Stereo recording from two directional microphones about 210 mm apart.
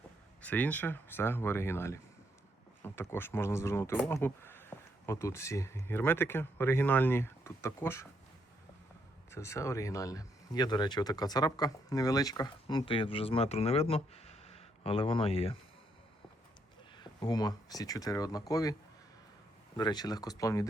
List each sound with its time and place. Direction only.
0.4 s speech: 10° left (ahead or behind)
9.3 s speech: 15° left (ahead or behind)
17.0 s speech: 20° left (ahead or behind)